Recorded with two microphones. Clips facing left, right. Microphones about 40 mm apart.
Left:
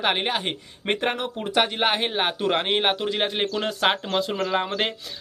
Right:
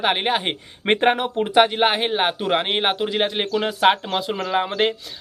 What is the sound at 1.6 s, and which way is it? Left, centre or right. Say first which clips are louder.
Speech: right 5 dB; centre.